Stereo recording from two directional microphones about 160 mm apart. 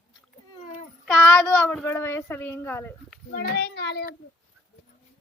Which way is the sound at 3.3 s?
80° left.